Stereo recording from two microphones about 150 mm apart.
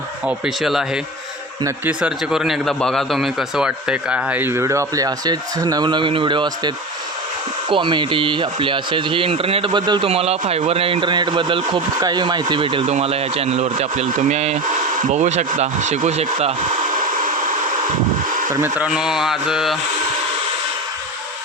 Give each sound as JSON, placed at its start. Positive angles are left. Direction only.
{"t": 0.3, "sound": "mantra", "side_deg": -5}
{"t": 1.6, "sound": "a man's voice", "side_deg": -10}
{"t": 10.1, "sound": "speech", "side_deg": -45}
{"t": 18.5, "sound": "a man's voice", "side_deg": -15}
{"t": 18.9, "sound": "mantra", "side_deg": -5}